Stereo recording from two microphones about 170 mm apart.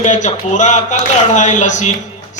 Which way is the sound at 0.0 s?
45° left (ahead or behind).